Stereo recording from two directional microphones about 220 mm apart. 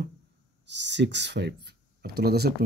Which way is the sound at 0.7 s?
55° right (ahead or behind).